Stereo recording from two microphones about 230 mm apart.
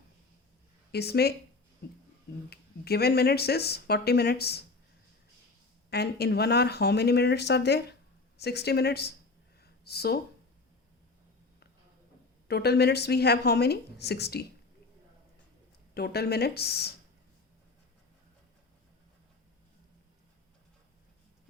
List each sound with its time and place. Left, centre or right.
0.9 s speech: left
5.9 s speech: left
9.6 s a sound: left
12.5 s speech: left
16.0 s speech: left